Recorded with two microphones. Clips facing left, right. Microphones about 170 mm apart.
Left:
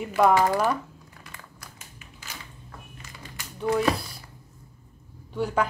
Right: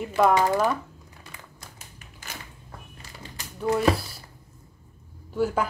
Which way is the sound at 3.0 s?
35° right (ahead or behind).